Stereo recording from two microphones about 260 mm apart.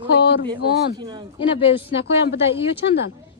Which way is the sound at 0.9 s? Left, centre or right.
Centre.